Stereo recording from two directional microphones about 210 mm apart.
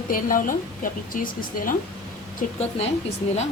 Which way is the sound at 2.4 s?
35° left (ahead or behind).